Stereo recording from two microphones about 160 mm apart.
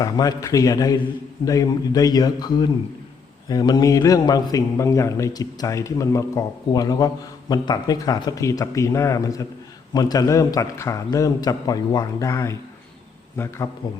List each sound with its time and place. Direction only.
0.0 s a man's voice: 20° left (ahead or behind)